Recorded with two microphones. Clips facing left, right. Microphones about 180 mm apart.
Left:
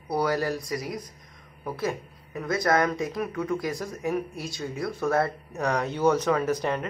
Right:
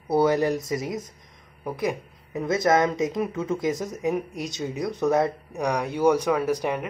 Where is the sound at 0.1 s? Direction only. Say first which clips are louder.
Right 5 dB; 25° right (ahead or behind).